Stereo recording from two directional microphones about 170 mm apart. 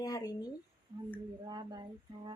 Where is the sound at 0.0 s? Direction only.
20° left (ahead or behind).